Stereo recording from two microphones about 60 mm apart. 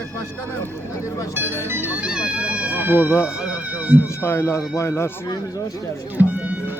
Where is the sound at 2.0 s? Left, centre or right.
Centre; by 3.0 s right.